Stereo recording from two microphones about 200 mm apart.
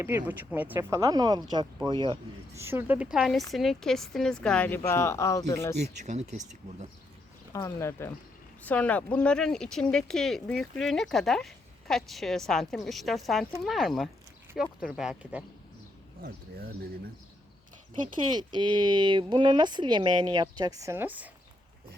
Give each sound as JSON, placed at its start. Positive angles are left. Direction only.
{"t": 0.0, "sound": "speech", "side_deg": -10}
{"t": 2.6, "sound": "speech", "side_deg": -10}
{"t": 5.7, "sound": "speech", "side_deg": -35}
{"t": 7.5, "sound": "speech", "side_deg": 15}
{"t": 18.0, "sound": "speech", "side_deg": -20}